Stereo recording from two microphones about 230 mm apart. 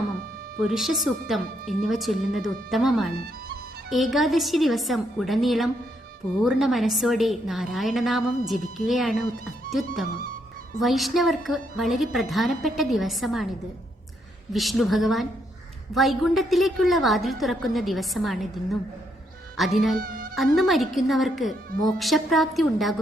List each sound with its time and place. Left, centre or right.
0.6 s a woman's voice: centre
14.5 s a woman's voice: centre
20.0 s music: right
20.6 s a woman's voice: centre